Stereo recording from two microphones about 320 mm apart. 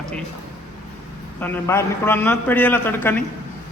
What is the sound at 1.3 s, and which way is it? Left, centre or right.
A man's voice, centre.